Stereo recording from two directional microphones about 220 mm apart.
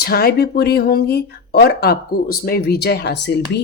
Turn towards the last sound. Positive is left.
turn(degrees=50)  # may be behind; listen again after turning